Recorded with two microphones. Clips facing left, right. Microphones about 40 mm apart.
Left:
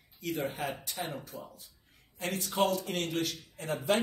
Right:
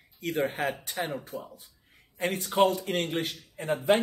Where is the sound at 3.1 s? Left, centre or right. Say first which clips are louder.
Right 2 dB; right.